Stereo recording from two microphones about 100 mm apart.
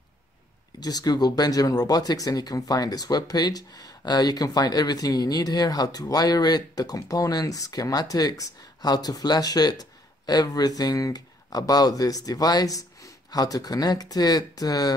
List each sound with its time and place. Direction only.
0.7 s speech: 40° left (ahead or behind)